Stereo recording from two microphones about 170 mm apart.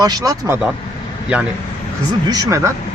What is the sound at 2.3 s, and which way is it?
Speech, 20° right (ahead or behind).